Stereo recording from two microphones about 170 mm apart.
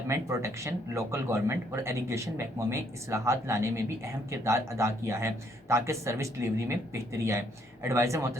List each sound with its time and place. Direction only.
0.1 s speech: 15° right (ahead or behind)